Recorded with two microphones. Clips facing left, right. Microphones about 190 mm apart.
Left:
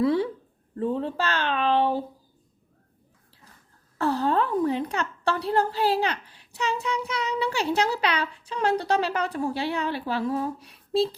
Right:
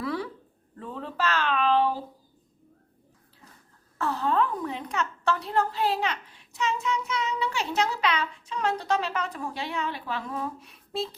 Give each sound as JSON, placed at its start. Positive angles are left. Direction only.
{"t": 0.0, "sound": "a sound", "side_deg": 25}
{"t": 0.8, "sound": "speech", "side_deg": 30}
{"t": 3.9, "sound": "a woman's voice", "side_deg": 35}